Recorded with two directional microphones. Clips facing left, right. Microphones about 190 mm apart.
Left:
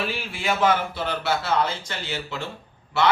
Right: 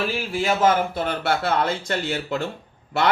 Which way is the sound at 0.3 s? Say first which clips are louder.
Right 3 dB; 40° right (ahead or behind).